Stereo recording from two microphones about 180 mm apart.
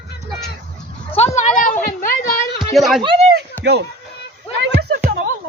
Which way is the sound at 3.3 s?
65° right (ahead or behind).